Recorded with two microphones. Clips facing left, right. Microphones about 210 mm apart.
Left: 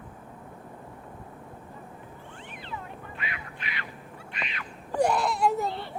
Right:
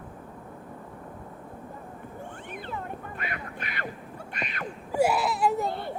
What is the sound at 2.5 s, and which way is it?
Cat, 50° right (ahead or behind).